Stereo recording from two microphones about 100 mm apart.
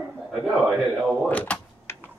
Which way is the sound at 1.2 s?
15° left (ahead or behind).